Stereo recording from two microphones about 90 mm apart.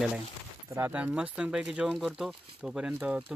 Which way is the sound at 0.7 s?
25° right (ahead or behind).